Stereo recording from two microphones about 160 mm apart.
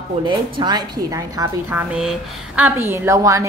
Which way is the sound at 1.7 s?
5° right (ahead or behind).